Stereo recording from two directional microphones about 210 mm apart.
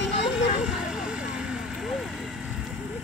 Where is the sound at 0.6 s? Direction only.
5° right (ahead or behind).